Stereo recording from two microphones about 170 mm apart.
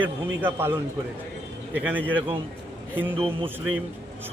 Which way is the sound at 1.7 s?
10° right (ahead or behind).